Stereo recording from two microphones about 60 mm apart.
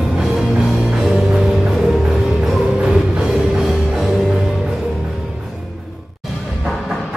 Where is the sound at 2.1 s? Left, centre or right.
Centre.